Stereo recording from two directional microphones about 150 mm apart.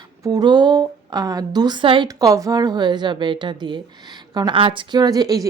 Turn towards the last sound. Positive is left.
turn(degrees=-25)  # may be behind; listen again after turning